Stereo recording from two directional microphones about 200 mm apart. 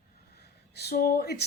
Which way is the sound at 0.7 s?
55° left (ahead or behind).